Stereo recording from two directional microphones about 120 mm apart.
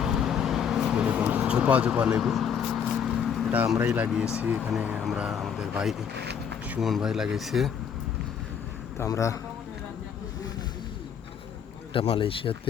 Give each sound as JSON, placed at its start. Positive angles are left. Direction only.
{"t": 0.0, "sound": "vehicle", "side_deg": -5}
{"t": 3.8, "sound": "speech", "side_deg": -10}
{"t": 9.0, "sound": "a man's voice", "side_deg": 25}
{"t": 11.9, "sound": "speech", "side_deg": 50}